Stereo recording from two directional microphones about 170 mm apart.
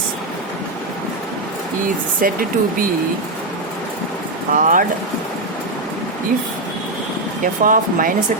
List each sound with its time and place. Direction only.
2.2 s speech: 55° right (ahead or behind)
4.5 s speech: 50° right (ahead or behind)
7.4 s speech: 55° right (ahead or behind)